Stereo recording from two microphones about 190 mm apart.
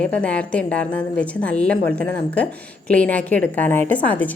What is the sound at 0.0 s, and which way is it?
A woman's voice, 5° left (ahead or behind).